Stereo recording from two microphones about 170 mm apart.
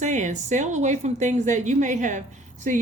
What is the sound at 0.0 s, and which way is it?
A woman's voice, 45° right (ahead or behind).